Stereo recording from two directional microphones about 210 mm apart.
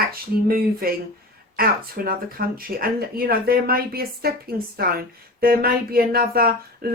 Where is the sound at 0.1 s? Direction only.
45° right (ahead or behind).